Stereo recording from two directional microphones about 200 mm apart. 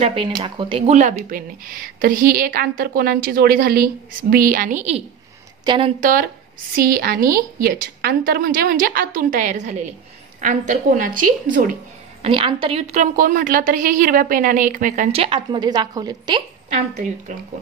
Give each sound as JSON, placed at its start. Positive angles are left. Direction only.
{"t": 0.0, "sound": "a woman's voice", "side_deg": -25}
{"t": 12.2, "sound": "a woman's voice", "side_deg": -25}